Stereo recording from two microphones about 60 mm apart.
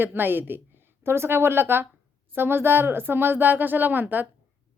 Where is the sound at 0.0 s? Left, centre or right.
Right.